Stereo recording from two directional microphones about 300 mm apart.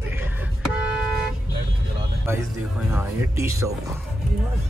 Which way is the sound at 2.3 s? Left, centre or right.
Centre.